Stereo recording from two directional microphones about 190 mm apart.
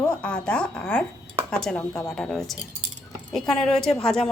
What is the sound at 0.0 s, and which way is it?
A woman's voice, 5° left (ahead or behind).